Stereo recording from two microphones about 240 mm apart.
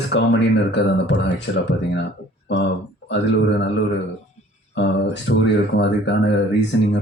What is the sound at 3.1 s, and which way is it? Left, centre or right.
Speech, left.